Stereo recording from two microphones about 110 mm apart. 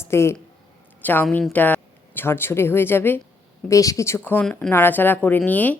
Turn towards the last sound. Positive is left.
turn(degrees=15)  # may be behind; listen again after turning